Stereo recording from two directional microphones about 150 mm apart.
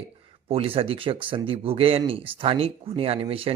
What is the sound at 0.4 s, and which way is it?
Speech, 40° right (ahead or behind).